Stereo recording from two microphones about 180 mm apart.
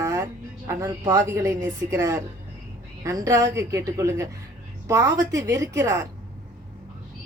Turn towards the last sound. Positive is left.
turn(degrees=-15)  # may be behind; listen again after turning